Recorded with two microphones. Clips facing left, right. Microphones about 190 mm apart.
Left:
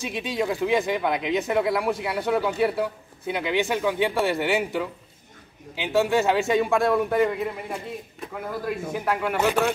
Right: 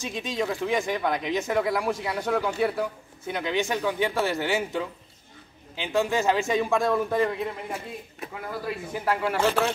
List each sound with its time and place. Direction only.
0.1 s a man's voice: 10° left (ahead or behind)
5.8 s a man's voice: centre (ahead or behind)
9.2 s speech: 15° left (ahead or behind)